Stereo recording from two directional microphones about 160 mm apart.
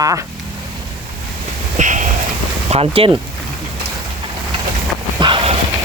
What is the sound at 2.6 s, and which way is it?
Speech, 40° right (ahead or behind).